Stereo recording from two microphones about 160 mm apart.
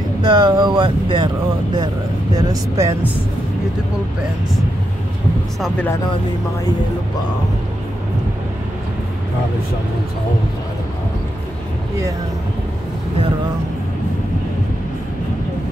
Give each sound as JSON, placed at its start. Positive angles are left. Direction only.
{"t": 0.2, "sound": "speech", "side_deg": -25}